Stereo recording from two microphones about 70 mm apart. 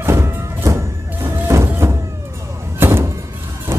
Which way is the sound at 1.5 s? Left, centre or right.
Right.